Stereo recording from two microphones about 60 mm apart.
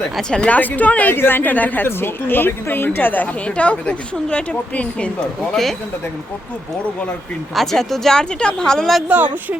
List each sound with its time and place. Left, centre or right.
0.2 s speech: centre
0.5 s speech: left
1.1 s a woman's voice: left
3.4 s speech: left
5.5 s speech: centre
7.5 s speech: centre
9.0 s speech: right